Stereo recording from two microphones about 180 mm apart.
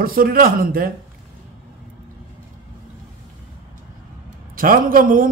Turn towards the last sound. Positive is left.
turn(degrees=-50)  # may be behind; listen again after turning